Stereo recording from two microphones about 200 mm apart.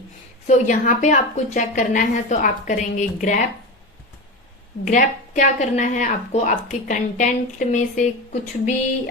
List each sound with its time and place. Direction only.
0.4 s a woman's voice: 35° left (ahead or behind)
4.9 s a woman's voice: 40° left (ahead or behind)